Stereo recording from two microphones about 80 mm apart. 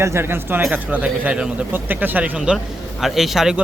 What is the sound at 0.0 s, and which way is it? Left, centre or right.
Speech, right.